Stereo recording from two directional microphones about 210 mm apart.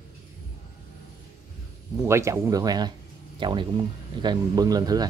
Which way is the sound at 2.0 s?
15° right (ahead or behind).